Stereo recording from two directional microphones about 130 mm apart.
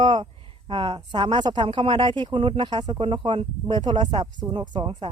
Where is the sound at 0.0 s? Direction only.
35° right (ahead or behind).